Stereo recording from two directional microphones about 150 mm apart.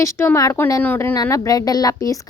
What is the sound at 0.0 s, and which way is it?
Speech, 15° left (ahead or behind).